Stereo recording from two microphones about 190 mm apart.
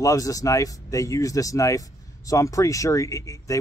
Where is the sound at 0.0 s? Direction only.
20° left (ahead or behind).